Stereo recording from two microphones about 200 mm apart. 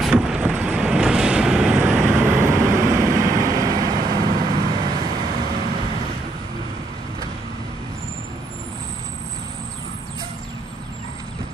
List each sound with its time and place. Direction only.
0.0 s vehicle: 5° right (ahead or behind); by 5.1 s 20° right (ahead or behind)
5.1 s vehicle: 45° right (ahead or behind)